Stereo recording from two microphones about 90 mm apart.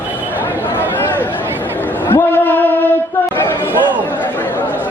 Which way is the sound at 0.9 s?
20° left (ahead or behind).